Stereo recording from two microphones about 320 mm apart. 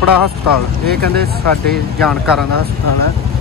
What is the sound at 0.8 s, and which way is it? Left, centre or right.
Speech, right.